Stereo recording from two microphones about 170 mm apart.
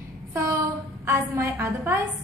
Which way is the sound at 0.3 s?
15° right (ahead or behind).